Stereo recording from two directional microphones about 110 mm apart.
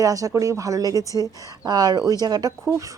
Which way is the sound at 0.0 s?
30° right (ahead or behind).